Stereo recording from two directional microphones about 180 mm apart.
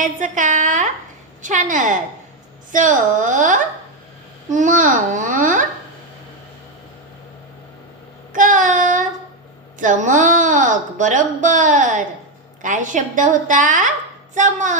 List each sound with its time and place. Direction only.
0.0 s speech: 45° right (ahead or behind)
8.3 s child singing: 45° right (ahead or behind)
9.8 s speech: 45° right (ahead or behind)